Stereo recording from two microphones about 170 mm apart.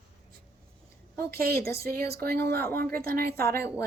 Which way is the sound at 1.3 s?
65° right (ahead or behind).